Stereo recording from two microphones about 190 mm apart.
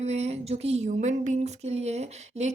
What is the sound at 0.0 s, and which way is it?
Speech, 35° right (ahead or behind).